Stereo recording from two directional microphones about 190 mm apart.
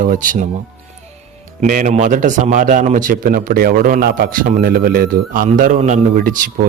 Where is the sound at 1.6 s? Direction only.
40° right (ahead or behind).